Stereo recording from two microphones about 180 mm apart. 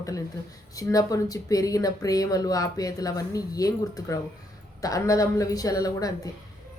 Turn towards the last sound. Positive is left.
turn(degrees=20)  # may be behind; listen again after turning